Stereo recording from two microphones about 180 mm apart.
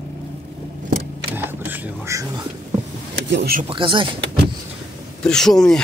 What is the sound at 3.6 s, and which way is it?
Speech, 30° right (ahead or behind).